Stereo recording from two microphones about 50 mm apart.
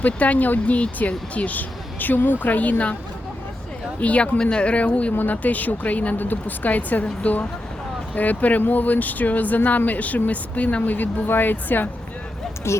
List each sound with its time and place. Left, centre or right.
0.0 s speech: left
4.0 s speech: left
11.3 s speech: left
12.7 s speech: left